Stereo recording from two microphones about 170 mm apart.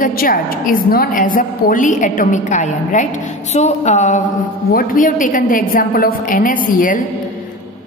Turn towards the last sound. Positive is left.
turn(degrees=50)  # may be behind; listen again after turning